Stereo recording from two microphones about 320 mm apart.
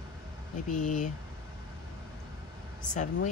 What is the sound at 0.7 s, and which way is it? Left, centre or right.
Speech, left.